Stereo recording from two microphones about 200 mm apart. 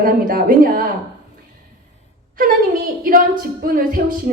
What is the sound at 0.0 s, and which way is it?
Speech, 45° right (ahead or behind).